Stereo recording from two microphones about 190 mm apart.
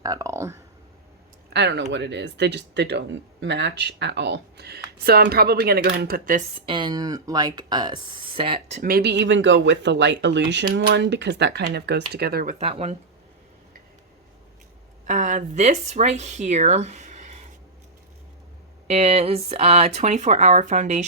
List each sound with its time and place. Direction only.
0.0 s speech: 20° right (ahead or behind)
1.5 s speech: 65° right (ahead or behind); by 6.4 s 50° right (ahead or behind)
6.7 s speech: 25° right (ahead or behind)
8.8 s speech: 50° right (ahead or behind)
12.5 s speech: 35° right (ahead or behind)
15.0 s speech: 40° right (ahead or behind)
18.9 s speech: 35° right (ahead or behind)